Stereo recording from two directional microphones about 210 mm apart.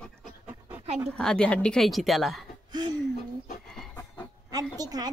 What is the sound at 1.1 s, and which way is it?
A woman's voice, 5° left (ahead or behind).